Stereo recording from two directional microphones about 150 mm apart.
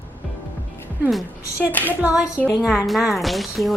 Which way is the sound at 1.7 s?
10° left (ahead or behind).